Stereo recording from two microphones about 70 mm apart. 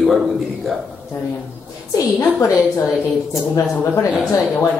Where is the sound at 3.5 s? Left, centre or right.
Left.